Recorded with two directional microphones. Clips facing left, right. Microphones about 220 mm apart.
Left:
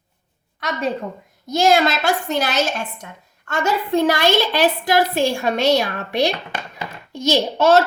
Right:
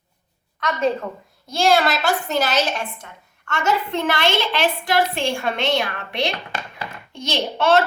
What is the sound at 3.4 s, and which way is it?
A woman's voice, 35° left (ahead or behind).